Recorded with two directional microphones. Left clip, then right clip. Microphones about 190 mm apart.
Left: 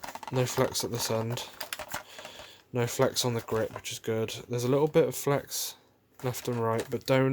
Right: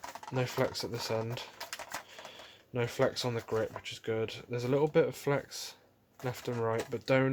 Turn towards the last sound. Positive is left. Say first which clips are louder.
# left 3 dB
turn(degrees=25)  # may be behind; listen again after turning